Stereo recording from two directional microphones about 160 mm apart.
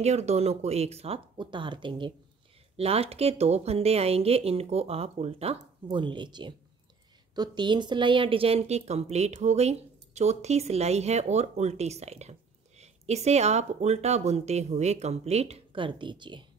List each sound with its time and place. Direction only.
0.0 s a woman's voice: 45° right (ahead or behind)